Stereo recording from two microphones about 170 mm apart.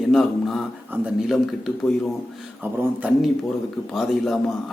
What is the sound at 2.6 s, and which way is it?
Speech, 10° right (ahead or behind).